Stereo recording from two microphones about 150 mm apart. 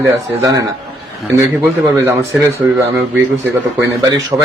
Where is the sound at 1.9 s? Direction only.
20° right (ahead or behind).